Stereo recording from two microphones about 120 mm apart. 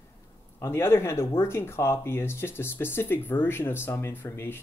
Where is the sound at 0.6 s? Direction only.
20° left (ahead or behind).